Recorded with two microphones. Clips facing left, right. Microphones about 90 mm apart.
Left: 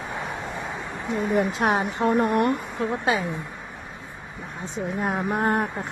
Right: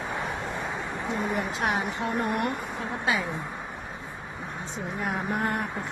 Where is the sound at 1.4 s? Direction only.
40° left (ahead or behind).